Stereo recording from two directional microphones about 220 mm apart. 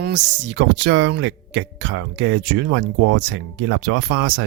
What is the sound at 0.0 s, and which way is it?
Speech, 55° right (ahead or behind).